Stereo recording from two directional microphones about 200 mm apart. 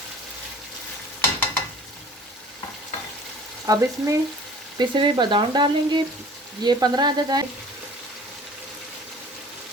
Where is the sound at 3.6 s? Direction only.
15° right (ahead or behind).